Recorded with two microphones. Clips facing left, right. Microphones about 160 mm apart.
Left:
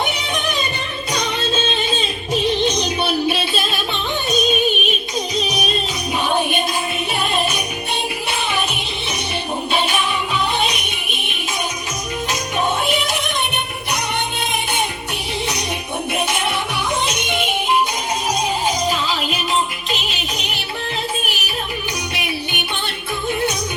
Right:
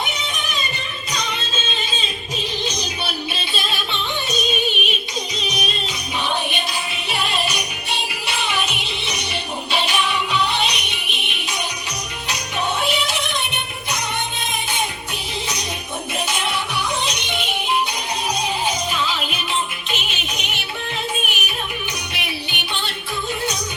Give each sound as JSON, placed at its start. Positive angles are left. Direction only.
{"t": 2.3, "sound": "music", "side_deg": 55}
{"t": 5.5, "sound": "music", "side_deg": 55}
{"t": 7.1, "sound": "music", "side_deg": 50}
{"t": 16.1, "sound": "music", "side_deg": 60}
{"t": 18.9, "sound": "music", "side_deg": 40}
{"t": 22.1, "sound": "music", "side_deg": 45}